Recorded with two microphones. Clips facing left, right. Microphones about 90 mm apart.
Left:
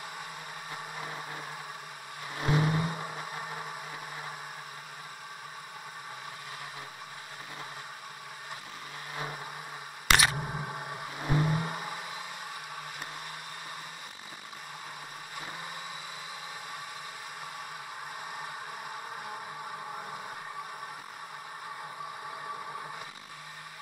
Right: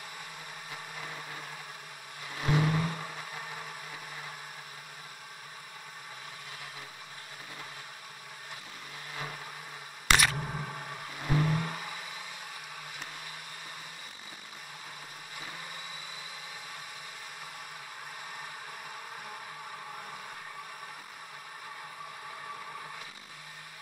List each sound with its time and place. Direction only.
0.7 s vehicle: 15° left (ahead or behind)
9.1 s vehicle: 15° left (ahead or behind)
10.0 s a sound: 10° left (ahead or behind)